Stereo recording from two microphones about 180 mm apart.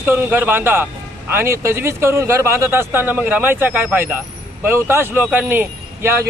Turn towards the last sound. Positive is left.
turn(degrees=-10)  # may be behind; listen again after turning